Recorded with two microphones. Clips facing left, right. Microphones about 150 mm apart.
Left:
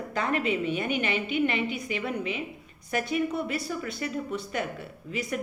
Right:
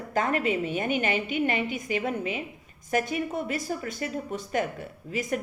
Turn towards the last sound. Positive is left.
turn(degrees=-45)  # may be behind; listen again after turning